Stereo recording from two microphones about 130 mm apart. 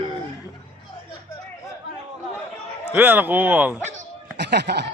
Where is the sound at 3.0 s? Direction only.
15° right (ahead or behind).